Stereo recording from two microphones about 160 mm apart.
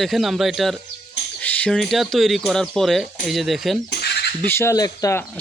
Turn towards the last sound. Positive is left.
turn(degrees=20)  # may be behind; listen again after turning